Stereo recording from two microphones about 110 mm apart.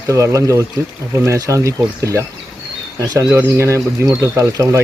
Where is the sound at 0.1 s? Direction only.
30° right (ahead or behind).